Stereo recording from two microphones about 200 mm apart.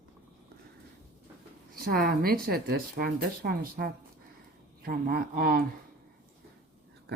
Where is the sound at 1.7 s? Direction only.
45° right (ahead or behind).